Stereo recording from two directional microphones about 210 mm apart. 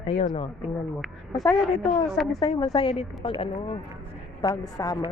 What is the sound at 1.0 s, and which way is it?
Speech, centre (ahead or behind).